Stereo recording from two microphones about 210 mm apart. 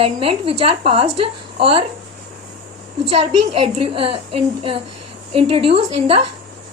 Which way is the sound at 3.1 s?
30° right (ahead or behind).